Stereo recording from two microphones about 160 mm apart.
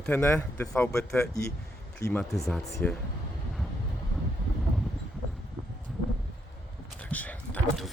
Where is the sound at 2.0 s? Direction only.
20° left (ahead or behind).